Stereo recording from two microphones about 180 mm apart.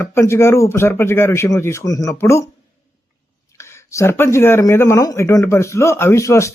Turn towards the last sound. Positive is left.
turn(degrees=15)  # may be behind; listen again after turning